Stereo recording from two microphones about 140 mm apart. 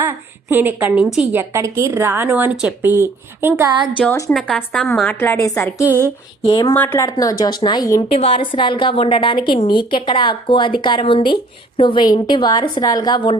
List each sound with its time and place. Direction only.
0.0 s a woman's voice: 15° right (ahead or behind)
1.4 s a woman's voice: 20° right (ahead or behind)
3.9 s a woman's voice: 10° left (ahead or behind)
5.8 s a woman's voice: 15° right (ahead or behind)
6.4 s a woman's voice: 35° left (ahead or behind)
6.7 s speech: 15° left (ahead or behind)
8.1 s a woman's voice: 40° left (ahead or behind)